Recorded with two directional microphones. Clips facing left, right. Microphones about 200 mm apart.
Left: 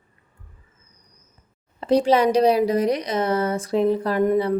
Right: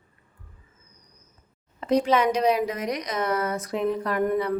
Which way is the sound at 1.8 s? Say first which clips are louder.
Left 4 dB; 30° left (ahead or behind).